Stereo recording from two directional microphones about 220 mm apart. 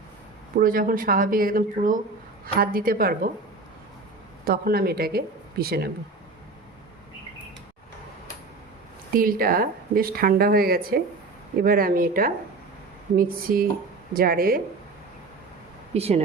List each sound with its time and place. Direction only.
0.6 s speech: 40° right (ahead or behind)
4.4 s speech: 45° right (ahead or behind)
9.1 s speech: 40° right (ahead or behind)
15.9 s speech: 30° right (ahead or behind)